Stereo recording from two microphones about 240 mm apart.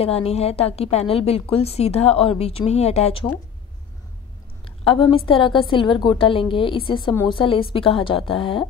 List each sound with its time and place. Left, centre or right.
0.0 s a woman's voice: left
4.8 s a woman's voice: left